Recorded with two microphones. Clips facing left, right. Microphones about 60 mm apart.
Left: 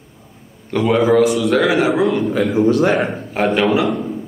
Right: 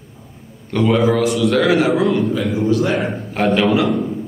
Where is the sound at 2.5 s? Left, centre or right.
Left.